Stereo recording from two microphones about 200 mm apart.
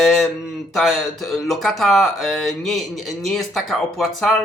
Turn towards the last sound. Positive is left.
turn(degrees=0)  # may be behind; listen again after turning